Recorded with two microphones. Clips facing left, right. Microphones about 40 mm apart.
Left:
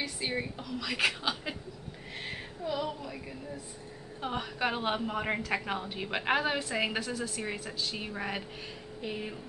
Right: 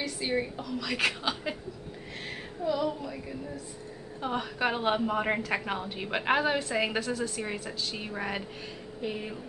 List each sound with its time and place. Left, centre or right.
0.2 s a woman's voice: centre
2.6 s a woman's voice: centre
4.2 s a woman's voice: centre